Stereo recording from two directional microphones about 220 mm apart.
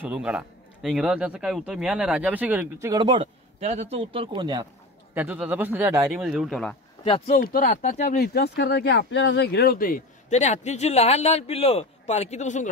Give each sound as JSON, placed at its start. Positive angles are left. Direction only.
{"t": 0.0, "sound": "a man's voice", "side_deg": -5}
{"t": 5.1, "sound": "a man's voice", "side_deg": -10}
{"t": 7.2, "sound": "speech", "side_deg": 40}